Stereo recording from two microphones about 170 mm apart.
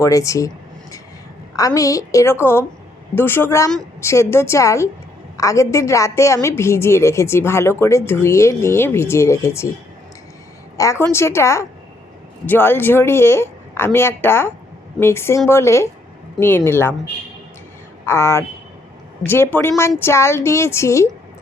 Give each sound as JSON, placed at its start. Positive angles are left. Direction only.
{"t": 0.0, "sound": "a sound", "side_deg": 20}
{"t": 1.5, "sound": "a woman's voice", "side_deg": 20}
{"t": 10.8, "sound": "a woman's voice", "side_deg": 15}
{"t": 18.0, "sound": "a woman's voice", "side_deg": 15}